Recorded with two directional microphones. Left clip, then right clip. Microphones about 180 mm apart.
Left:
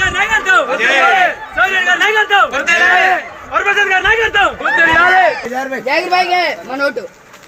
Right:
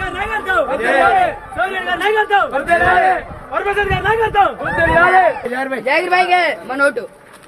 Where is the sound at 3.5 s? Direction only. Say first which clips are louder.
Left 5 dB; 5° right (ahead or behind).